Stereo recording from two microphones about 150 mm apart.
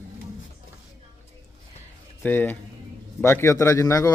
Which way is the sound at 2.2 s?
10° left (ahead or behind).